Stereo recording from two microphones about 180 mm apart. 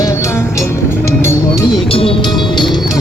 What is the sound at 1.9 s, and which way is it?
Speech, 30° left (ahead or behind).